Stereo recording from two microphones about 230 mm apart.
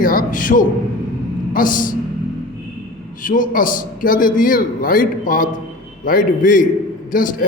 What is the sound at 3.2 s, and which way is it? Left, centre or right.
A man's voice, left.